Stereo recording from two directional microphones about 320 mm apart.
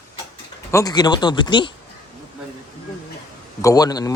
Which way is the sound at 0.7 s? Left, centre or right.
Centre.